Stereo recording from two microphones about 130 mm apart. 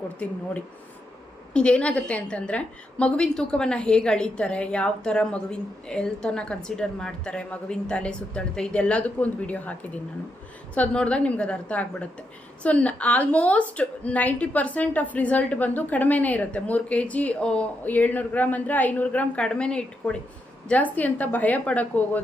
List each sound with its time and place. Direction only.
1.5 s a woman's voice: 10° left (ahead or behind)
10.8 s a woman's voice: 10° left (ahead or behind)